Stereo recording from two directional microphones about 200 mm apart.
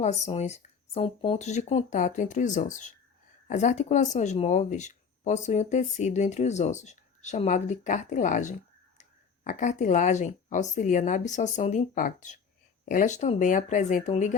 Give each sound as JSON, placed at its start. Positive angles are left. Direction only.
{"t": 0.0, "sound": "speech", "side_deg": 35}